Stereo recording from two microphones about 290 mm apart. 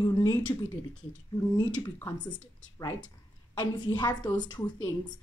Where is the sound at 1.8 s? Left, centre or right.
Centre.